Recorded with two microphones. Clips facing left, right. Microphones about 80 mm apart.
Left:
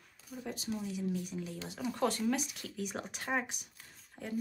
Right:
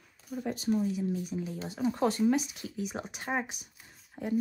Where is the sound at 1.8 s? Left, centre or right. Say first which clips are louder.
Right 6 dB; centre.